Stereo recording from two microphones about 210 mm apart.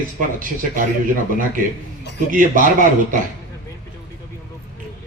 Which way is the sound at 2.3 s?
40° right (ahead or behind).